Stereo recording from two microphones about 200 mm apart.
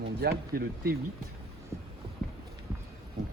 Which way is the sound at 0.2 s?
55° right (ahead or behind).